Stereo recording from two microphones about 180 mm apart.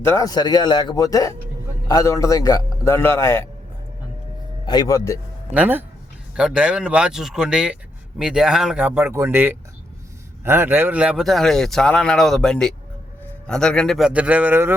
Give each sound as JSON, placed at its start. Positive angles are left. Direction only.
{"t": 0.0, "sound": "a man's voice", "side_deg": 15}
{"t": 4.6, "sound": "a man's voice", "side_deg": 25}
{"t": 5.5, "sound": "speech", "side_deg": -10}